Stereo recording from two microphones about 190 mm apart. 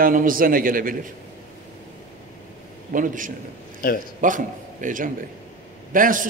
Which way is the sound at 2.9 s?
45° right (ahead or behind).